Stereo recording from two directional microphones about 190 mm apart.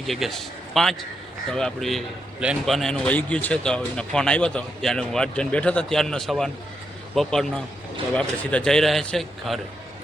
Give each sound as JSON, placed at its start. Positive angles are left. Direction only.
{"t": 0.1, "sound": "a man's voice", "side_deg": 0}